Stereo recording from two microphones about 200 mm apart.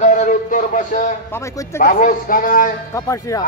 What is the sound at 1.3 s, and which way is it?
Speech, 15° left (ahead or behind).